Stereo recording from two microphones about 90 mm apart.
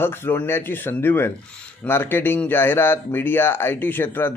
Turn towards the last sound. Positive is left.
turn(degrees=20)  # may be behind; listen again after turning